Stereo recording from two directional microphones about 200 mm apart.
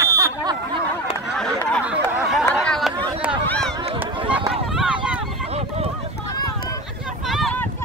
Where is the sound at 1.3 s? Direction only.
5° left (ahead or behind).